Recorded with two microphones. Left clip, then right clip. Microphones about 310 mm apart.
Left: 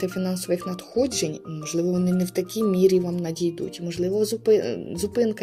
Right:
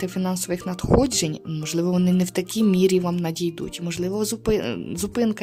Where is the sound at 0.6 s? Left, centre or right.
Right.